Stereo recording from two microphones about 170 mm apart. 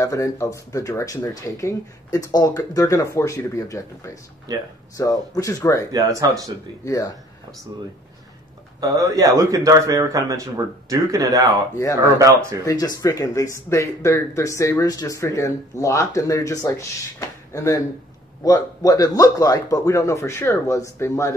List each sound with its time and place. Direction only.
0.0 s speech: 20° left (ahead or behind)
4.5 s a man's voice: 20° right (ahead or behind)
4.9 s speech: 20° left (ahead or behind)
5.9 s a man's voice: 20° right (ahead or behind)
6.8 s speech: 20° left (ahead or behind)
8.8 s a man's voice: 20° right (ahead or behind)
12.6 s speech: 20° left (ahead or behind)